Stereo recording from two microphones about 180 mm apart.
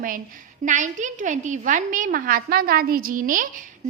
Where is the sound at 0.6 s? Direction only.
45° right (ahead or behind).